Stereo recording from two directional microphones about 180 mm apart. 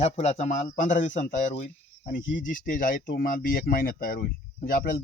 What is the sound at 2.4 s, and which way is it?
A man's voice, 50° left (ahead or behind).